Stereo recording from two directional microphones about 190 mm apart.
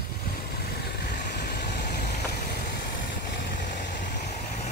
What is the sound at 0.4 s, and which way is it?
Vehicle, 55° left (ahead or behind).